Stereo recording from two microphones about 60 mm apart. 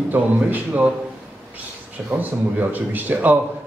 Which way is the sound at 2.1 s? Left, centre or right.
Right.